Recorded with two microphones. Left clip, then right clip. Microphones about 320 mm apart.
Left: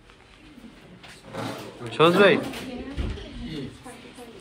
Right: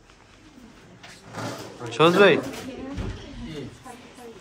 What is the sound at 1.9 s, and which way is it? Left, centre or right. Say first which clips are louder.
Speech: right 1 dB; centre.